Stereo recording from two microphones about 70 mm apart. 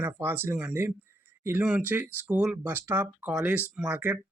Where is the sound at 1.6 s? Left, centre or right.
Centre.